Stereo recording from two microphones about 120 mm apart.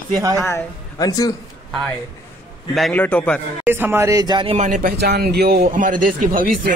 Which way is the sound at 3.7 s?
20° right (ahead or behind).